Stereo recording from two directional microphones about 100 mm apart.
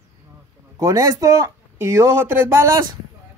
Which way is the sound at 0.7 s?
35° right (ahead or behind).